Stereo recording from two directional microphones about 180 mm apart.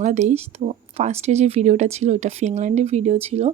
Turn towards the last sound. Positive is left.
turn(degrees=-35)  # may be behind; listen again after turning